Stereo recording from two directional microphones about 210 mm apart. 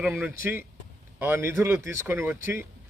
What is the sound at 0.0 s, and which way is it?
A man's voice, 10° right (ahead or behind).